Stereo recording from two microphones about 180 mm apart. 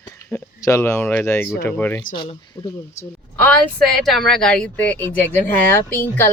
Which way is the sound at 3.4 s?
5° left (ahead or behind).